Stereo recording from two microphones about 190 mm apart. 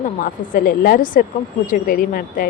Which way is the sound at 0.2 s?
45° left (ahead or behind).